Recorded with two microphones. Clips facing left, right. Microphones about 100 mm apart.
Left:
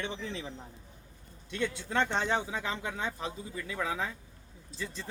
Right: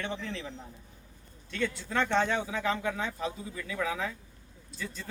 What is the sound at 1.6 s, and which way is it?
Speech, 25° left (ahead or behind).